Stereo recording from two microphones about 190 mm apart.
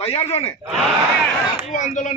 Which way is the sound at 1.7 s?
40° left (ahead or behind).